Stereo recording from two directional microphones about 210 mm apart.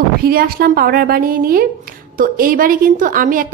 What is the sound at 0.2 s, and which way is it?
A woman's voice, 45° right (ahead or behind).